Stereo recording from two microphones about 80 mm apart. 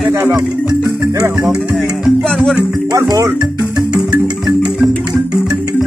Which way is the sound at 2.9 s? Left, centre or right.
Right.